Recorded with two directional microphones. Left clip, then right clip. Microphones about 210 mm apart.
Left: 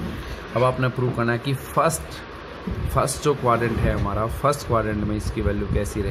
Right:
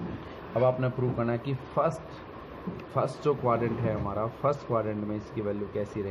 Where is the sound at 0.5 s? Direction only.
45° left (ahead or behind).